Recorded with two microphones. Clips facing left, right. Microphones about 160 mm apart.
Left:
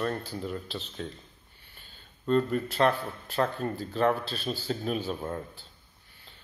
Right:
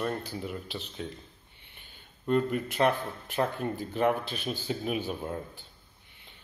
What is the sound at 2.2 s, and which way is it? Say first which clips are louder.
Speech: left 1 dB; 15° right (ahead or behind).